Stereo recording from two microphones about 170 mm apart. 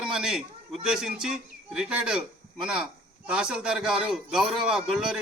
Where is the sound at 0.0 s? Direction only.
5° right (ahead or behind).